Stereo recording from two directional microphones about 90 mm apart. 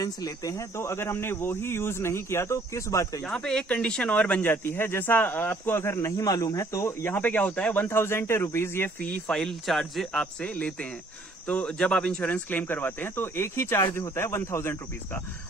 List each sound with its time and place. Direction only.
0.0 s speech: 40° left (ahead or behind)
3.3 s speech: 10° left (ahead or behind); by 8.9 s 25° left (ahead or behind)
9.0 s speech: 10° left (ahead or behind)
10.4 s speech: 15° left (ahead or behind)